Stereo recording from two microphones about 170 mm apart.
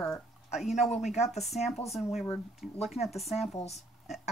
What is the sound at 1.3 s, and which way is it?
Speech, centre (ahead or behind).